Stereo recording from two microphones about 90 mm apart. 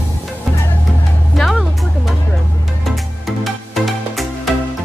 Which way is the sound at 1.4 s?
Centre (ahead or behind).